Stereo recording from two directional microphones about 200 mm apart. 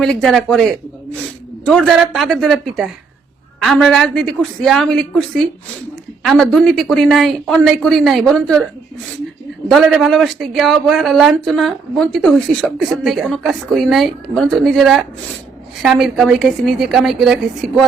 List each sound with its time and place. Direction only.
0.0 s a woman's voice: centre (ahead or behind)
9.6 s a woman's voice: centre (ahead or behind)